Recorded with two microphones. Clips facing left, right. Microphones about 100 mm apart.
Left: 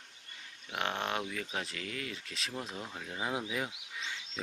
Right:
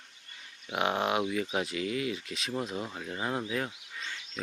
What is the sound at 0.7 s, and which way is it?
Speech, 10° right (ahead or behind).